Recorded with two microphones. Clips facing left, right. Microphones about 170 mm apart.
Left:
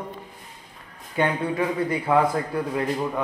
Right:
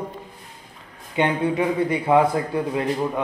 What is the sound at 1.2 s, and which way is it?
Speech, 20° right (ahead or behind).